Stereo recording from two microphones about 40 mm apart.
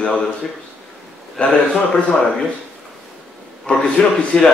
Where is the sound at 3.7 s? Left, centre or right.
Left.